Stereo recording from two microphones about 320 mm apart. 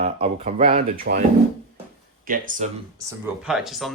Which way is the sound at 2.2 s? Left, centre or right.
Right.